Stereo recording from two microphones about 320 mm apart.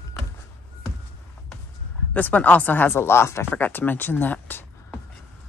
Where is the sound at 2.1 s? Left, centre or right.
Centre.